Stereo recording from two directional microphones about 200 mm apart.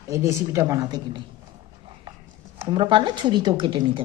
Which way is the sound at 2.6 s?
25° right (ahead or behind).